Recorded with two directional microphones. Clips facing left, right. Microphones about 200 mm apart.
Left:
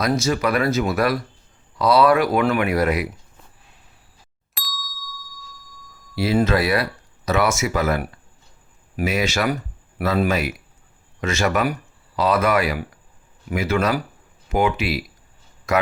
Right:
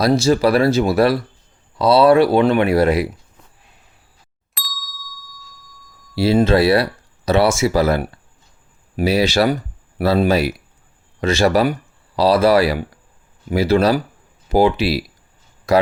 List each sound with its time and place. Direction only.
0.0 s speech: 30° right (ahead or behind)
4.5 s ding: centre (ahead or behind)
6.1 s speech: 30° right (ahead or behind)